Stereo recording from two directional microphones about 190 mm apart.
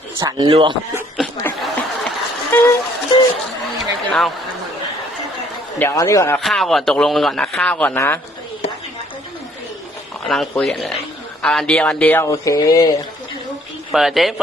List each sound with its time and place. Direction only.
0.2 s speech: 20° right (ahead or behind)
1.6 s a sound: 10° left (ahead or behind)
3.8 s speech: centre (ahead or behind)
5.8 s speech: 15° left (ahead or behind)
6.4 s a man's voice: centre (ahead or behind)
10.2 s a man's voice: centre (ahead or behind); by 12.9 s 20° left (ahead or behind)
13.9 s a man's voice: centre (ahead or behind)